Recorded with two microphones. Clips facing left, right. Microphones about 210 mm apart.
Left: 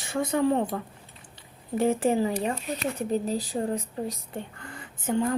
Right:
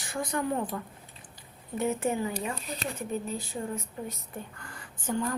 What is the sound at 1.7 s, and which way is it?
A woman's voice, 30° left (ahead or behind).